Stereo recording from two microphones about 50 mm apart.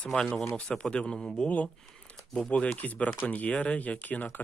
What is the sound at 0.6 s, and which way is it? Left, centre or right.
Speech, centre.